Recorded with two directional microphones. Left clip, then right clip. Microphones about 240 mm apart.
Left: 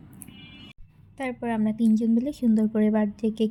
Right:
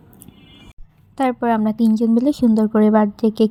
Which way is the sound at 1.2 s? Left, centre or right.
Right.